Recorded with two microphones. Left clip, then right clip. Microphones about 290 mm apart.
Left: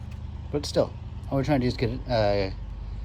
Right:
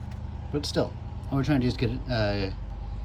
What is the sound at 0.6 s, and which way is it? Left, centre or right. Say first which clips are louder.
Speech: left 4 dB; centre.